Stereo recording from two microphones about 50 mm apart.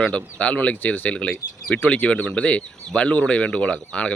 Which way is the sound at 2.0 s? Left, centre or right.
Left.